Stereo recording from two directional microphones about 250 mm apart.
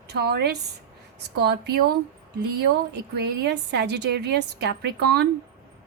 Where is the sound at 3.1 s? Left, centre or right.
Right.